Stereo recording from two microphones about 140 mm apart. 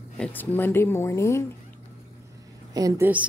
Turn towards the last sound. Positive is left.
turn(degrees=-15)  # may be behind; listen again after turning